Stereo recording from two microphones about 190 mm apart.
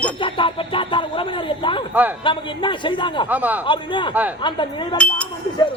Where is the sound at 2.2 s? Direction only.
25° left (ahead or behind).